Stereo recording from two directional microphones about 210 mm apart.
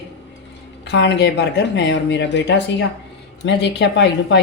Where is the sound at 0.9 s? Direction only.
55° left (ahead or behind).